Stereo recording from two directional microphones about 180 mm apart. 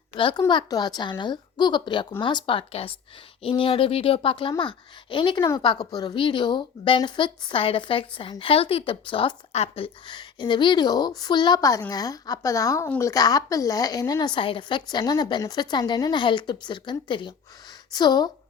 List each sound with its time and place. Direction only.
0.2 s a woman's voice: 25° left (ahead or behind)